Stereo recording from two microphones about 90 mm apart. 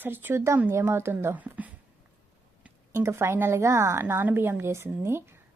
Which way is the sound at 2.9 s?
30° right (ahead or behind).